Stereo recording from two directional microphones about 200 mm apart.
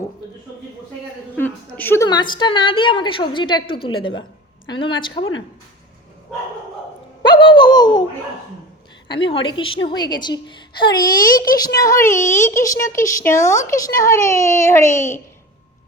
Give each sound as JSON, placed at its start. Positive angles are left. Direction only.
{"t": 1.4, "sound": "a woman's voice", "side_deg": 10}
{"t": 7.2, "sound": "a woman's voice", "side_deg": 25}
{"t": 9.0, "sound": "a woman's voice", "side_deg": 25}
{"t": 11.3, "sound": "a woman's voice", "side_deg": 45}
{"t": 11.5, "sound": "speech", "side_deg": 20}